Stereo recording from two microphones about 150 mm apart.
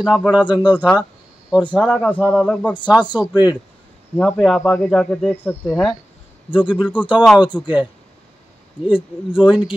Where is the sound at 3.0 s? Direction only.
30° left (ahead or behind).